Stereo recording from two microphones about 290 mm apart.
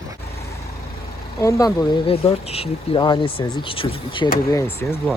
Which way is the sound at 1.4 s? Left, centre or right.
Centre.